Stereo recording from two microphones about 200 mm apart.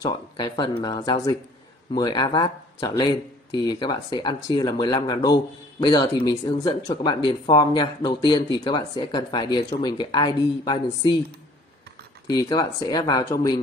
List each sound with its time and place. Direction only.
0.4 s speech: 20° left (ahead or behind)
12.3 s speech: 20° left (ahead or behind)